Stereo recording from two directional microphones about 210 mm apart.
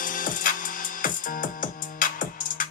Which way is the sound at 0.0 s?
40° left (ahead or behind).